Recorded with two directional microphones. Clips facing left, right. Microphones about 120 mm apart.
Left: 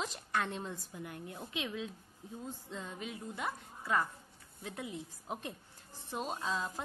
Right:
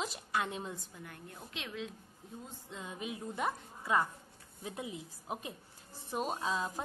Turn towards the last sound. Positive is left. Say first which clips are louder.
# right 2 dB
turn(degrees=-20)  # may be behind; listen again after turning